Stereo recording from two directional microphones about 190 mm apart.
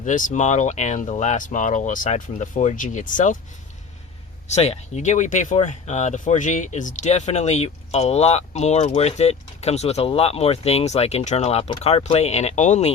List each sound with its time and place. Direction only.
0.0 s speech: 40° left (ahead or behind)
4.4 s speech: 35° left (ahead or behind)